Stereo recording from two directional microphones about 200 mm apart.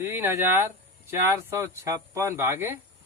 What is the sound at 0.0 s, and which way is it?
Speech, 10° right (ahead or behind).